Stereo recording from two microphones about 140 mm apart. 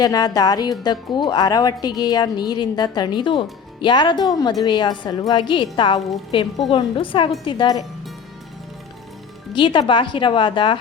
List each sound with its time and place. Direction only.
0.0 s a woman's voice: 25° left (ahead or behind)
9.6 s a woman's voice: 35° left (ahead or behind)